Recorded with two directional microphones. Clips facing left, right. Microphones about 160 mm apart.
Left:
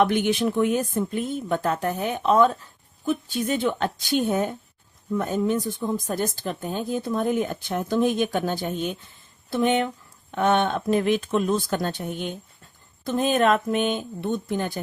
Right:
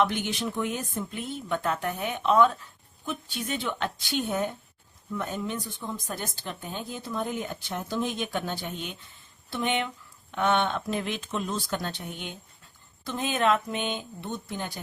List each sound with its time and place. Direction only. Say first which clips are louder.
0.0 s speech: left 6 dB; 55° left (ahead or behind)